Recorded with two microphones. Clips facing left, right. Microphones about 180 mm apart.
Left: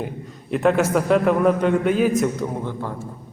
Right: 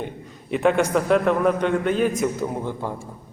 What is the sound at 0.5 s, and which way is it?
A man's voice, centre (ahead or behind).